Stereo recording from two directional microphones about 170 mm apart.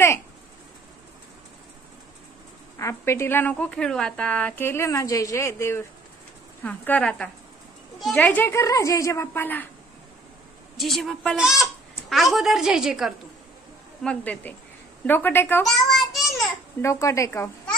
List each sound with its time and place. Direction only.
2.8 s a woman's voice: 15° left (ahead or behind)
10.8 s a woman's voice: centre (ahead or behind)
14.0 s a woman's voice: 10° left (ahead or behind)
15.6 s child singing: centre (ahead or behind)
16.8 s a woman's voice: 20° left (ahead or behind)